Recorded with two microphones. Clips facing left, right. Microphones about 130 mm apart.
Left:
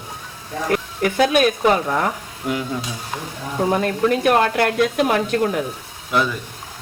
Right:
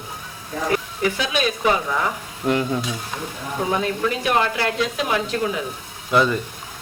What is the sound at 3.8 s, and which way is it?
Speech, 50° left (ahead or behind).